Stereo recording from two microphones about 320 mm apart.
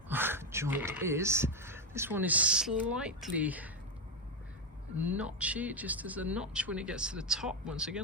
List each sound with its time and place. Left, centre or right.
0.1 s speech: centre
4.9 s speech: centre